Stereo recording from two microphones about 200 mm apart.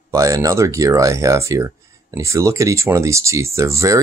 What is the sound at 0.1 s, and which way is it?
Speech, 15° right (ahead or behind).